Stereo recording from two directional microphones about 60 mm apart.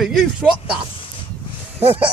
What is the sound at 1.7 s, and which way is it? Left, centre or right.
Speech, right.